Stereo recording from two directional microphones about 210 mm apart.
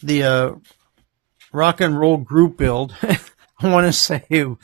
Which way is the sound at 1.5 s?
40° right (ahead or behind).